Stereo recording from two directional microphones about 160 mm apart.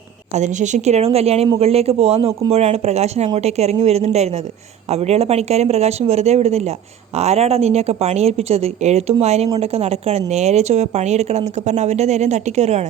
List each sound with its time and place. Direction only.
0.3 s a woman's voice: 50° right (ahead or behind)